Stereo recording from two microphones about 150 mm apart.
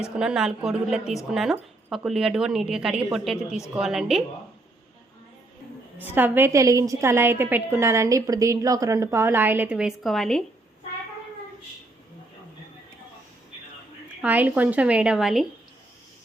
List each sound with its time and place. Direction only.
0.0 s speech: 5° right (ahead or behind)
6.1 s a woman's voice: 15° right (ahead or behind); by 10.4 s centre (ahead or behind)
14.2 s a woman's voice: 10° right (ahead or behind)